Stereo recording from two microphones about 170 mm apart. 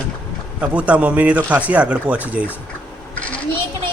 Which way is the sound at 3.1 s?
5° left (ahead or behind).